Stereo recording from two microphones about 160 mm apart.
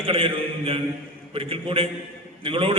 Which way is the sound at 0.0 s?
35° right (ahead or behind).